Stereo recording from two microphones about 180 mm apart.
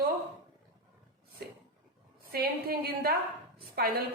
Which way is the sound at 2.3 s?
60° right (ahead or behind).